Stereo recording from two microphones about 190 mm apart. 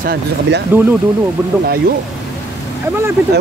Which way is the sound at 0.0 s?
60° right (ahead or behind).